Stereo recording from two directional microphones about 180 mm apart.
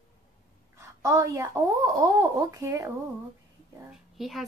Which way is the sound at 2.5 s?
20° right (ahead or behind).